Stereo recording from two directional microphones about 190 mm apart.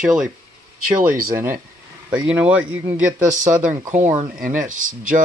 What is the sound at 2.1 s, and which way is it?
Speech, 5° right (ahead or behind).